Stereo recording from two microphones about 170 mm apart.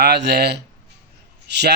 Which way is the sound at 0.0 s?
75° right (ahead or behind).